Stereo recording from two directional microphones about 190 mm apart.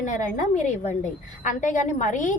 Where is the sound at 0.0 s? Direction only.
40° left (ahead or behind).